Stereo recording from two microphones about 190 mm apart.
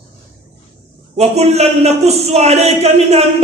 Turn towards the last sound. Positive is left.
turn(degrees=-35)  # may be behind; listen again after turning